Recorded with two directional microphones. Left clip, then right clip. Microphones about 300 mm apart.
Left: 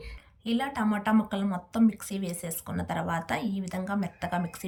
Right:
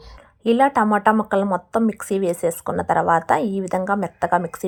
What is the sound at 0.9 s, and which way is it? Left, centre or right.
Speech, right.